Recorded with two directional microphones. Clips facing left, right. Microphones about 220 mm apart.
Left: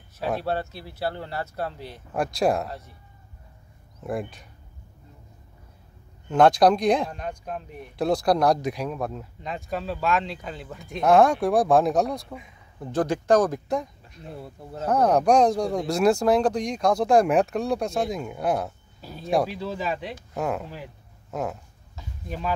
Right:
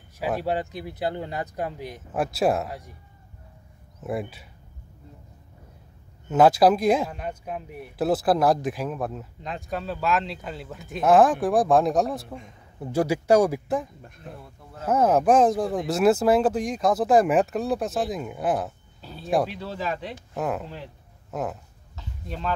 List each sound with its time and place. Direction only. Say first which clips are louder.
0.2 s speech: right 1 dB; 10° right (ahead or behind)
4.0 s speech: even; 5° right (ahead or behind)
6.2 s speech: even; 5° right (ahead or behind)
14.4 s speech: left 6 dB; 30° left (ahead or behind)
14.9 s speech: even; 5° right (ahead or behind)
18.9 s speech: left 2 dB; 10° left (ahead or behind)
19.2 s speech: left 1 dB; centre (ahead or behind)
21.9 s a sound: left 1 dB; 10° left (ahead or behind)